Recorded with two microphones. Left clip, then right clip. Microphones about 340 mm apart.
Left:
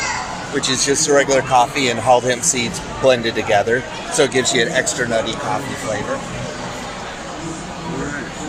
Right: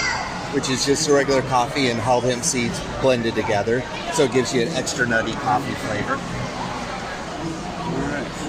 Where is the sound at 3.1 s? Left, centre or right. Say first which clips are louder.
Left 5 dB; left.